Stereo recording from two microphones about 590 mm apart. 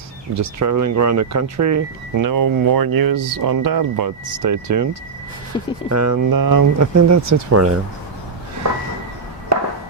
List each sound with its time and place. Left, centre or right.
0.3 s speech: right
5.5 s speech: centre
5.9 s speech: right
9.5 s chop: right